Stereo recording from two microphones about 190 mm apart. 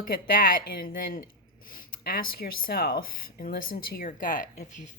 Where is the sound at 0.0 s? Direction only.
50° left (ahead or behind).